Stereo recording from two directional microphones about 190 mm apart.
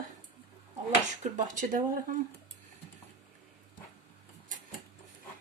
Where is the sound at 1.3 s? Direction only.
45° right (ahead or behind).